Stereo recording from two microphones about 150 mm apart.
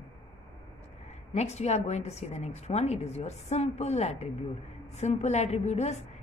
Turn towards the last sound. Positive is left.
turn(degrees=50)  # may be behind; listen again after turning